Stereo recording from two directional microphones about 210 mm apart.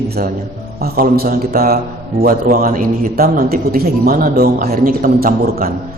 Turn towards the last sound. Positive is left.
turn(degrees=-45)  # may be behind; listen again after turning